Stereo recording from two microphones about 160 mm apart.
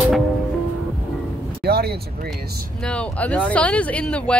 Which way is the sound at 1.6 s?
80° right.